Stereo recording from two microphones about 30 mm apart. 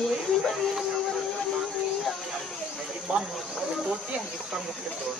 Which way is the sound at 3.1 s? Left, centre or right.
Right.